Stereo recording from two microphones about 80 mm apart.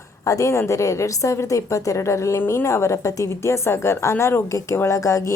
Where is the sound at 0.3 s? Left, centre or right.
Left.